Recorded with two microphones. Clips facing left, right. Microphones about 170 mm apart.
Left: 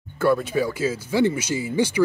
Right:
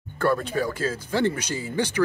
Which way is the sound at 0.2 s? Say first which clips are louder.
Left 3 dB; 10° left (ahead or behind).